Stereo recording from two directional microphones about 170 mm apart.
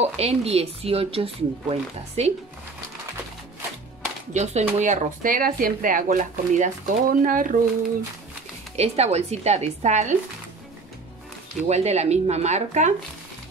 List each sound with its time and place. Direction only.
0.0 s speech: 35° right (ahead or behind)
4.3 s speech: 45° right (ahead or behind)
8.7 s speech: 40° right (ahead or behind)
11.6 s speech: 40° right (ahead or behind)